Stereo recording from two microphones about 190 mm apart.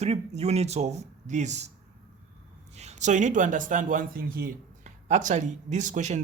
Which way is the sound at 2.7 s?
35° right (ahead or behind).